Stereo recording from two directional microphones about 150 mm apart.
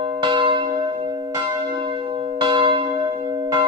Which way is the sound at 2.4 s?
35° right (ahead or behind).